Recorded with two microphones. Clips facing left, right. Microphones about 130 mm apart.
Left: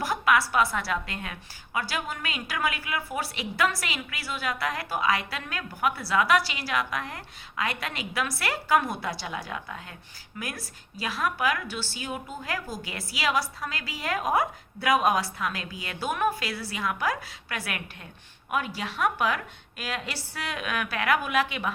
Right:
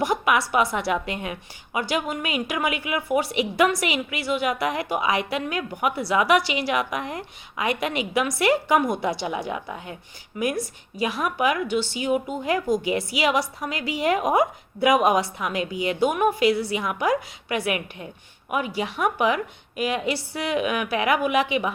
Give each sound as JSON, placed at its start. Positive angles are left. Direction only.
{"t": 0.0, "sound": "a woman's voice", "side_deg": -20}